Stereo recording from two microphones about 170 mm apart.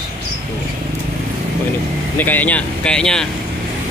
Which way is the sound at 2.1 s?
10° left (ahead or behind).